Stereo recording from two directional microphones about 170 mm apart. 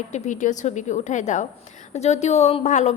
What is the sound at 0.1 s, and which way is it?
A woman's voice, 45° left (ahead or behind).